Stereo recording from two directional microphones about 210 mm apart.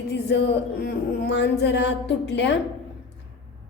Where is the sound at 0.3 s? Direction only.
55° left (ahead or behind).